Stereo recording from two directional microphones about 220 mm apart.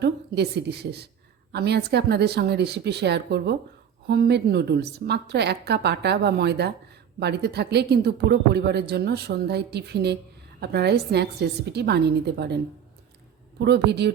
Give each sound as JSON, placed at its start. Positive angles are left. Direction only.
{"t": 0.0, "sound": "a woman's voice", "side_deg": -50}
{"t": 13.6, "sound": "speech", "side_deg": -50}